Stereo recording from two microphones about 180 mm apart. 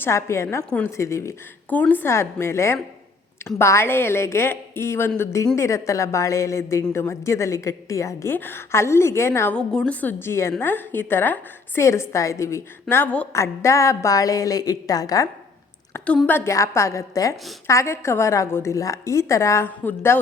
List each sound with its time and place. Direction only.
0.0 s a woman's voice: 15° left (ahead or behind)